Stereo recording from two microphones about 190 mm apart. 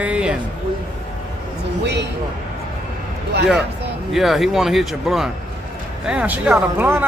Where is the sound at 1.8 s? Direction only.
65° right (ahead or behind).